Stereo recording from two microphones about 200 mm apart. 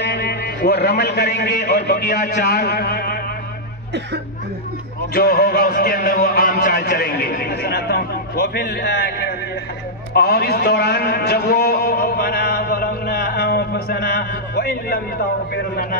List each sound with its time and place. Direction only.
0.0 s a man's voice: 55° left (ahead or behind)
5.1 s a man's voice: 50° left (ahead or behind)